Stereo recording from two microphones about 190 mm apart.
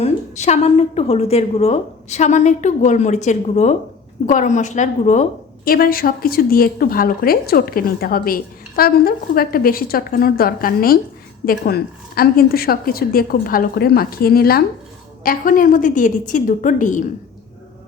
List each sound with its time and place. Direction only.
0.0 s a woman's voice: 35° left (ahead or behind)
5.6 s speech: 50° left (ahead or behind)